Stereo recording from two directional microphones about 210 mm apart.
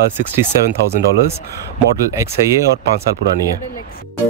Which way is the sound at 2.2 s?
15° right (ahead or behind).